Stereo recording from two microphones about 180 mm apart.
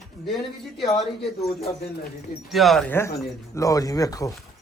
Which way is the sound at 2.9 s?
15° left (ahead or behind).